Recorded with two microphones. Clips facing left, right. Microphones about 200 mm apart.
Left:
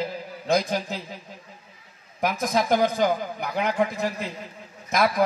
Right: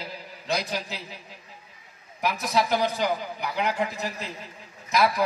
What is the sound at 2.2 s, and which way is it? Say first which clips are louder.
A man's voice: left 2 dB; 50° left (ahead or behind).